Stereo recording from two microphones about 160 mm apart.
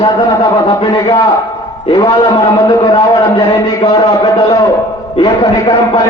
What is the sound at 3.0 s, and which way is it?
Speech, 20° left (ahead or behind).